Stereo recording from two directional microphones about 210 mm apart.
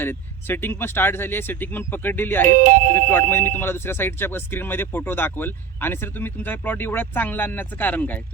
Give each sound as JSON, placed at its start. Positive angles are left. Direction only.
{"t": 0.0, "sound": "speech", "side_deg": 10}
{"t": 2.5, "sound": "speech", "side_deg": -40}
{"t": 3.1, "sound": "speech", "side_deg": 10}